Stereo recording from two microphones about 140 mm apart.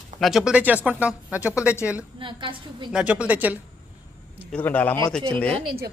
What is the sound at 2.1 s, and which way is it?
Speech, 35° right (ahead or behind).